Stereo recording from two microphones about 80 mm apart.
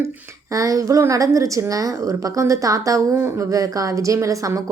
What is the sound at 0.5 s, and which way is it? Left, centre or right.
A woman's voice, right.